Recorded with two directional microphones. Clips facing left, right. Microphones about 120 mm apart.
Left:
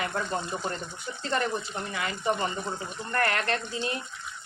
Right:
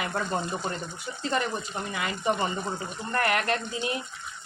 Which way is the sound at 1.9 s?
20° right (ahead or behind).